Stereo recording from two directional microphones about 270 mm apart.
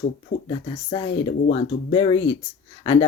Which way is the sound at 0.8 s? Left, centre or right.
Centre.